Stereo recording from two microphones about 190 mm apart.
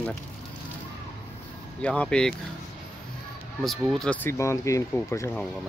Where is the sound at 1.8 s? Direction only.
5° left (ahead or behind).